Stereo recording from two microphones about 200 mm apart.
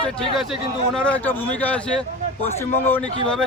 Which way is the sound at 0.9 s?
5° left (ahead or behind).